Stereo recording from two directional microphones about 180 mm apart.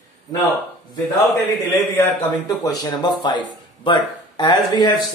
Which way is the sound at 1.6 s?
10° left (ahead or behind).